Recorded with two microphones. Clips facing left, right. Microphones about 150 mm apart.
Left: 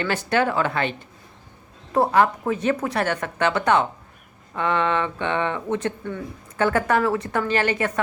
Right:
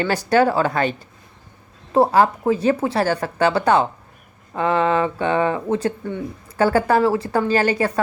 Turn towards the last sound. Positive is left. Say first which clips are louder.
# right 4 dB
turn(degrees=-35)  # may be behind; listen again after turning